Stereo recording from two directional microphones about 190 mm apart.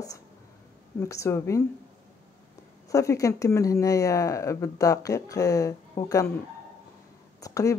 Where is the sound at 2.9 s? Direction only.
15° left (ahead or behind).